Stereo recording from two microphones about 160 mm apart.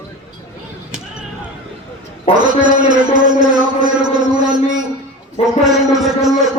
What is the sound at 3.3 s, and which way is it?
Music, 25° right (ahead or behind).